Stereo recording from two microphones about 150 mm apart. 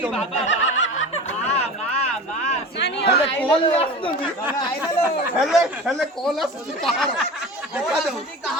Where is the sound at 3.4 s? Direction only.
35° left (ahead or behind).